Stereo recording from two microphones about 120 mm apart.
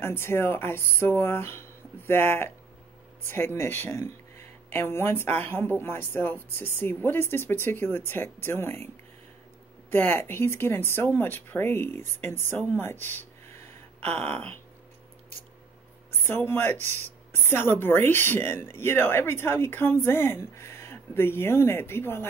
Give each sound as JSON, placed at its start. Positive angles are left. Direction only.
{"t": 0.0, "sound": "speech", "side_deg": 20}
{"t": 9.8, "sound": "speech", "side_deg": 15}
{"t": 16.3, "sound": "speech", "side_deg": 20}